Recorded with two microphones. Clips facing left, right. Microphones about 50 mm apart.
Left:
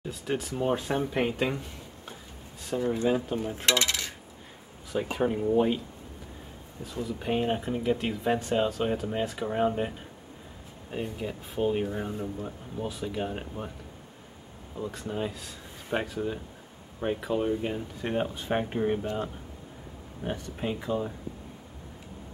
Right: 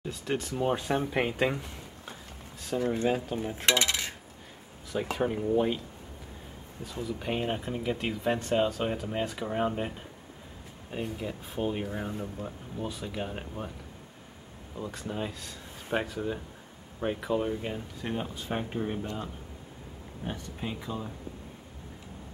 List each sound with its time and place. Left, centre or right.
0.1 s speech: centre
2.8 s speech: right
3.4 s coin: centre
5.1 s speech: centre
6.8 s speech: centre
14.8 s speech: centre
18.0 s speech: left